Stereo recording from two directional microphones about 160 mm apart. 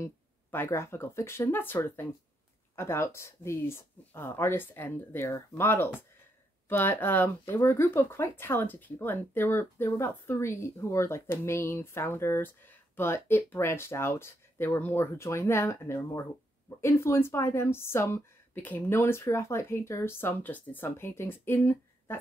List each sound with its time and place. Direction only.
0.0 s speech: 15° left (ahead or behind)